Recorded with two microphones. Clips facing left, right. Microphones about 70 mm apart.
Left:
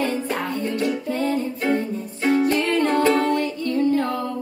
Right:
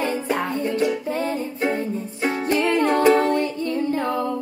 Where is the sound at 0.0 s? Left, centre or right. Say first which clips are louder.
Right 1 dB; centre.